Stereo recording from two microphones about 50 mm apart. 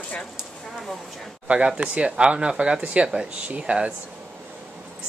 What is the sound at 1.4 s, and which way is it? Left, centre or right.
Speech, right.